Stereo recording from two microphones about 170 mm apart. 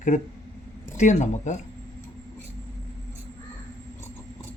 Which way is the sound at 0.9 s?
45° left (ahead or behind).